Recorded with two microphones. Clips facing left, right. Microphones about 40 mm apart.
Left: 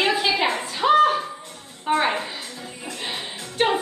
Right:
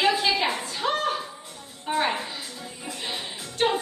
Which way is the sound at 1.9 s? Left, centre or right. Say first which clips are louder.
Left 4 dB; centre.